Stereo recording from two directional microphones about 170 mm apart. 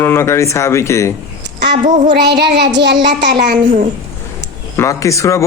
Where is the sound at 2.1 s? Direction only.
80° right.